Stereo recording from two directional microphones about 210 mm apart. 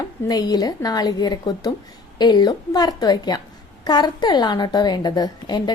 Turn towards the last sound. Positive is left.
turn(degrees=20)  # may be behind; listen again after turning